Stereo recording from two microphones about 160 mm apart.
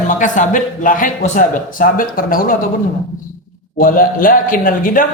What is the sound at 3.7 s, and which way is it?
Speech, 60° left (ahead or behind).